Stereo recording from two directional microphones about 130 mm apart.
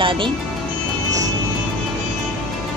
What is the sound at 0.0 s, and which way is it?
Music, 40° right (ahead or behind).